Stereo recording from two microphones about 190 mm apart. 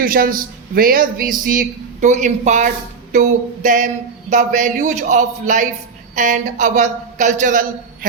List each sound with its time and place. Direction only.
0.0 s speech: 50° right (ahead or behind)